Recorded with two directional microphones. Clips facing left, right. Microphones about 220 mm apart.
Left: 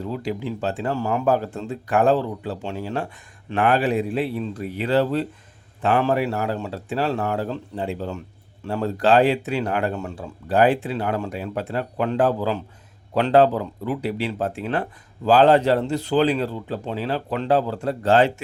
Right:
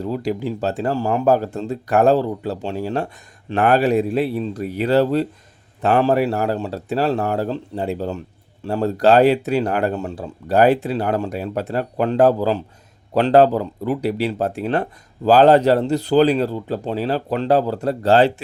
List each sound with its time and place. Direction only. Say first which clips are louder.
0.0 s speech: right 4 dB; 40° right (ahead or behind)